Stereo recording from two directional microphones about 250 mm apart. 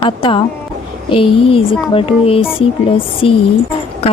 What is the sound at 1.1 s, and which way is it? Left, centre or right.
Speech, left.